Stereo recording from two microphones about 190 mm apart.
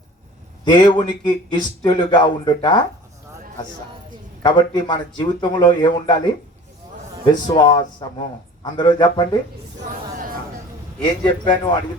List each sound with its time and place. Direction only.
0.6 s a man's voice: 20° left (ahead or behind)
4.4 s a man's voice: 20° left (ahead or behind)
7.4 s a man's voice: 20° left (ahead or behind)
11.0 s a man's voice: 25° left (ahead or behind)